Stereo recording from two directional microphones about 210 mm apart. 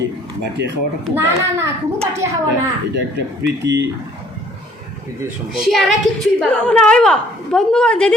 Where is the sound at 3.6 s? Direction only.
55° right (ahead or behind).